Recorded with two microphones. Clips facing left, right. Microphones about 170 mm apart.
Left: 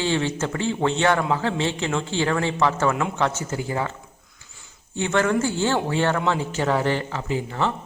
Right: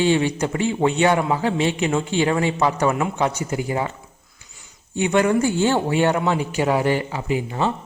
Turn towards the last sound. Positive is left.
turn(degrees=-15)  # may be behind; listen again after turning